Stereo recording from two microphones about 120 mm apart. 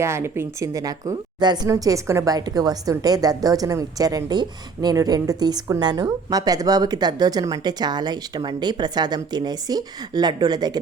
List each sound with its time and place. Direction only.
0.0 s a woman's voice: 20° right (ahead or behind)